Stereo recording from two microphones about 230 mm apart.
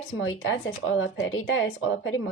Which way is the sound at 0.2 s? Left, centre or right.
Left.